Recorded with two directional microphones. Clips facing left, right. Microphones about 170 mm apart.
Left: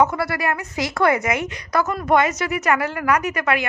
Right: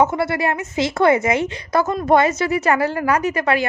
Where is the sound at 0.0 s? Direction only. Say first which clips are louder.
Right 2 dB; 25° right (ahead or behind).